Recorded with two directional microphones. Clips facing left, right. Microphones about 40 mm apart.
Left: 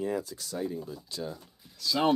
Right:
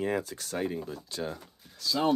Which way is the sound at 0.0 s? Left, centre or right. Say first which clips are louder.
Right 1 dB; right.